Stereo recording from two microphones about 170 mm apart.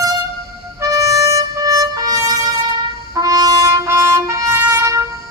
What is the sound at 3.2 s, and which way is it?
Trumpet, 20° right (ahead or behind).